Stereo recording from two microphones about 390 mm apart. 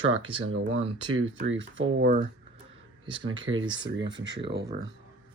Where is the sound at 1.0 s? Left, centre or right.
Right.